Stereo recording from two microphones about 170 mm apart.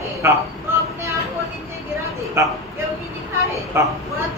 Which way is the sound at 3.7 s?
15° right (ahead or behind).